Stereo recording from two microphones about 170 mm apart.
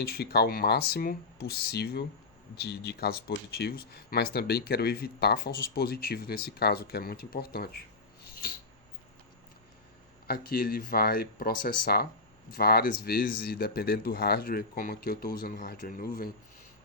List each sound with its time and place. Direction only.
0.0 s speech: 70° left (ahead or behind)
10.2 s speech: 60° left (ahead or behind)